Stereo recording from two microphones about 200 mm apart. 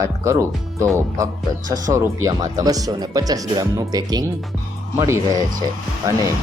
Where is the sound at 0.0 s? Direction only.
15° right (ahead or behind).